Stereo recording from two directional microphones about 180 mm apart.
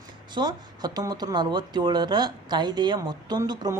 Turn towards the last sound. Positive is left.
turn(degrees=-20)  # may be behind; listen again after turning